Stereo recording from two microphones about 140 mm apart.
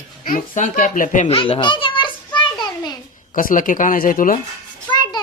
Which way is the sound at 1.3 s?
45° left (ahead or behind).